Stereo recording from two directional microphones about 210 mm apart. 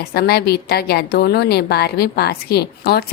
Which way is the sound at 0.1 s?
50° left (ahead or behind).